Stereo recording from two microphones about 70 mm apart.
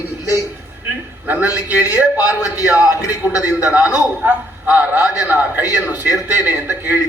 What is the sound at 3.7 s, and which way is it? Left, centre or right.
A man's voice, right.